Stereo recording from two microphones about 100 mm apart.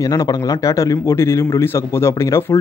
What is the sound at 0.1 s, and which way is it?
Speech, 40° left (ahead or behind).